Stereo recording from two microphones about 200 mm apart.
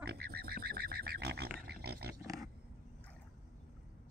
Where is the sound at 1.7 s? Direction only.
55° right (ahead or behind).